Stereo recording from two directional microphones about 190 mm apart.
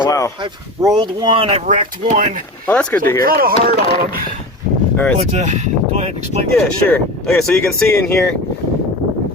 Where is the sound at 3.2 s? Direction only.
50° right (ahead or behind).